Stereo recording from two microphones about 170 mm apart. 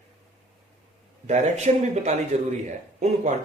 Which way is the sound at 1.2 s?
40° right (ahead or behind).